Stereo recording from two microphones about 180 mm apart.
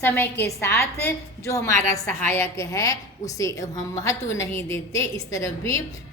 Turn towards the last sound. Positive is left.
turn(degrees=15)  # may be behind; listen again after turning